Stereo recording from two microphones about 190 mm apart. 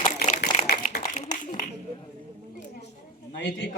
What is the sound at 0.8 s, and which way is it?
Speech, 40° left (ahead or behind).